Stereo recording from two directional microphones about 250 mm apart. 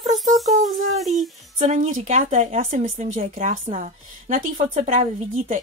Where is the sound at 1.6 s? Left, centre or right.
Right.